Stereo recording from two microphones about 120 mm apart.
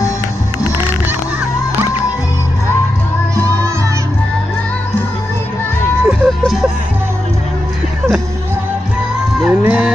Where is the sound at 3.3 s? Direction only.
25° right (ahead or behind).